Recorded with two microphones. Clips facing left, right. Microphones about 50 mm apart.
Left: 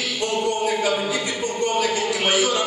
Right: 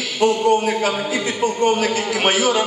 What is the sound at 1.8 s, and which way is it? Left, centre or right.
Speech, right.